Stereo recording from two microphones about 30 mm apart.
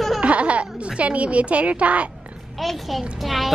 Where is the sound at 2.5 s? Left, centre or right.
Centre.